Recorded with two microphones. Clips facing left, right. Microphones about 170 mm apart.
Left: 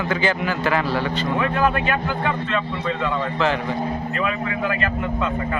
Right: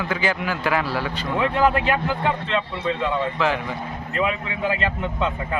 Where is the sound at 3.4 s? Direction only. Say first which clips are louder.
Left 3 dB; 10° right (ahead or behind).